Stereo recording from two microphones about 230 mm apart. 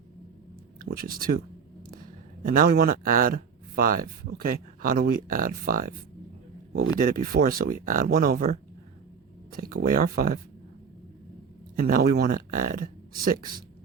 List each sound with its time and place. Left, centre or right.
0.8 s speech: right
2.4 s speech: right
7.0 s speech: right
11.8 s speech: right